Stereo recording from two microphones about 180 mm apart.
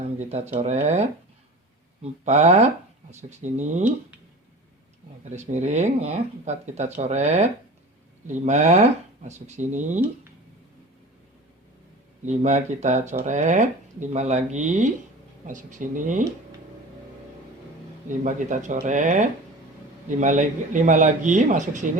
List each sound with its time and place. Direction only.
0.0 s speech: 40° right (ahead or behind)
5.3 s speech: 40° right (ahead or behind)
12.2 s a man's voice: 40° right (ahead or behind)
18.1 s a man's voice: 45° right (ahead or behind)